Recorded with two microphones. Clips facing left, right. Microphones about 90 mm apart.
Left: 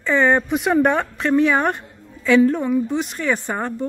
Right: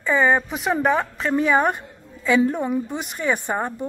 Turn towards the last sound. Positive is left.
turn(degrees=-10)  # may be behind; listen again after turning